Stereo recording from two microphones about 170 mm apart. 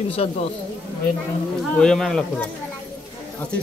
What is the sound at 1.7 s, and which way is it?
Speech, centre (ahead or behind).